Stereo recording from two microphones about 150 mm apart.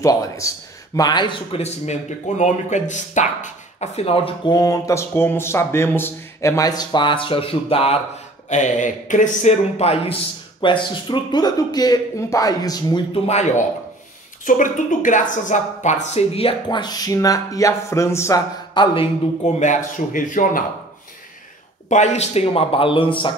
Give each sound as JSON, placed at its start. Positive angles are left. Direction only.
{"t": 0.0, "sound": "speech", "side_deg": 20}
{"t": 1.6, "sound": "speech", "side_deg": 50}
{"t": 8.5, "sound": "a man's voice", "side_deg": 55}
{"t": 10.6, "sound": "speech", "side_deg": 35}
{"t": 13.1, "sound": "a man's voice", "side_deg": 45}
{"t": 18.7, "sound": "a man's voice", "side_deg": 30}
{"t": 19.4, "sound": "speech", "side_deg": 55}
{"t": 21.8, "sound": "speech", "side_deg": 50}